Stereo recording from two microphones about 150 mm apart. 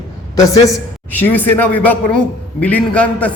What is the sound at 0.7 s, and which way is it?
A man's voice, 10° left (ahead or behind).